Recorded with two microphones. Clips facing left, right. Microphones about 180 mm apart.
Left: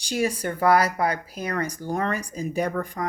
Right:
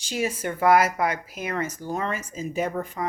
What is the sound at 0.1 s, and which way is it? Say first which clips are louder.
Speech: left 2 dB; 40° left (ahead or behind).